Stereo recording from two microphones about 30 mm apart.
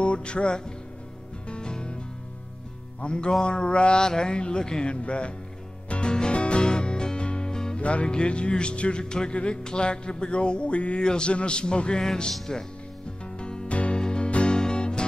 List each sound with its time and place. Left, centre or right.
0.0 s music: left
3.0 s music: left
4.0 s speech: left
4.4 s music: left
4.9 s music: left
6.0 s music: left
7.2 s music: left
7.5 s music: left
7.8 s music: left
9.6 s music: left
11.1 s music: left
12.5 s speech: left
13.2 s music: left
13.9 s music: left